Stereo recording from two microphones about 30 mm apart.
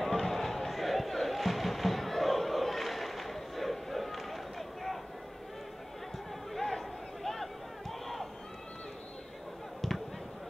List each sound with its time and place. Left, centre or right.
0.0 s music: centre
6.5 s a sound: centre
9.8 s basketball bounce: centre